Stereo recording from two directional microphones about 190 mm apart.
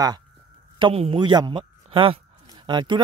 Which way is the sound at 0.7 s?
30° right (ahead or behind).